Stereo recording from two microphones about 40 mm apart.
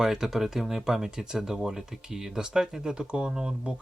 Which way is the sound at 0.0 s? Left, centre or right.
Centre.